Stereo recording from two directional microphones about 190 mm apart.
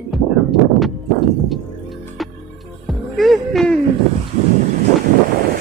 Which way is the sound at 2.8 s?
Centre (ahead or behind).